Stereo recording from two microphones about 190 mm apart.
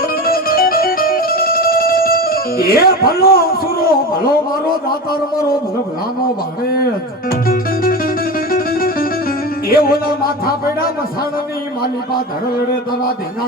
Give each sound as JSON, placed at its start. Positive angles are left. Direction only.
{"t": 0.3, "sound": "music", "side_deg": 50}
{"t": 7.3, "sound": "music", "side_deg": 50}
{"t": 9.6, "sound": "a man's voice", "side_deg": 50}